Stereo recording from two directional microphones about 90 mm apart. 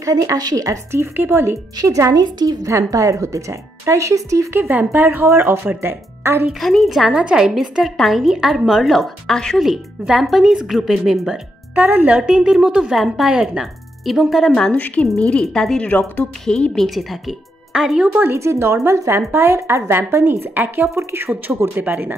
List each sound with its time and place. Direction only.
0.0 s speech: 40° right (ahead or behind)
1.1 s a woman's voice: 25° right (ahead or behind)
1.8 s speech: 40° right (ahead or behind)
2.6 s speech: 35° right (ahead or behind)
4.6 s a woman's voice: 20° right (ahead or behind)
6.6 s a woman's voice: centre (ahead or behind)
11.7 s a woman's voice: 20° right (ahead or behind)
12.2 s a woman's voice: 10° right (ahead or behind)
14.5 s speech: 15° left (ahead or behind)
15.9 s a woman's voice: 20° left (ahead or behind); by 18.1 s 5° right (ahead or behind)
18.1 s a woman's voice: 25° right (ahead or behind)